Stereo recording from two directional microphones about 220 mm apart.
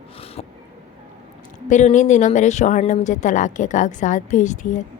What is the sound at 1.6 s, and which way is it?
A woman's voice, 35° left (ahead or behind).